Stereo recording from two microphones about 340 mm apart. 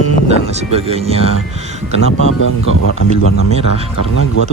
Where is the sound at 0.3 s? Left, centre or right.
Centre.